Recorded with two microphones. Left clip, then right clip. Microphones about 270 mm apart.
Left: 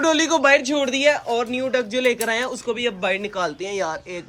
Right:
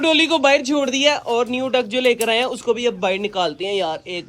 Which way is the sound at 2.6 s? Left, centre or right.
Centre.